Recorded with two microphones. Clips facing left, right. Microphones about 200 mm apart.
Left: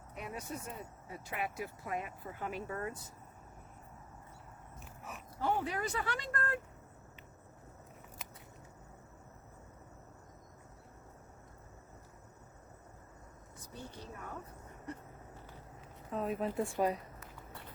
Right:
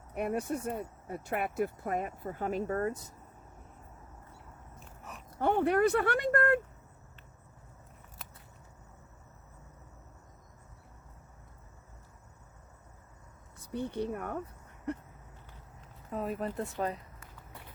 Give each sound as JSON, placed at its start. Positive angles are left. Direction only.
{"t": 0.1, "sound": "speech", "side_deg": -60}
{"t": 5.4, "sound": "speech", "side_deg": -60}
{"t": 13.7, "sound": "speech", "side_deg": -60}
{"t": 16.1, "sound": "speech", "side_deg": 0}
{"t": 16.7, "sound": "speech", "side_deg": 15}